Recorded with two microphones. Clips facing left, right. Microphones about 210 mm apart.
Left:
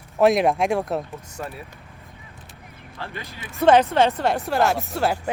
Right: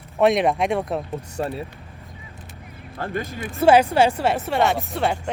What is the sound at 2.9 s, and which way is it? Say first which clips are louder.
Speech: right 8 dB; 50° right (ahead or behind).